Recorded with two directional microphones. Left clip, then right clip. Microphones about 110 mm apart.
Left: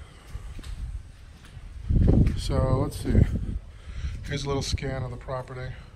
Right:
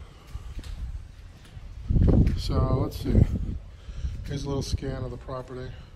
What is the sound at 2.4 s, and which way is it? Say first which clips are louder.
Speech: left 2 dB; 50° right (ahead or behind).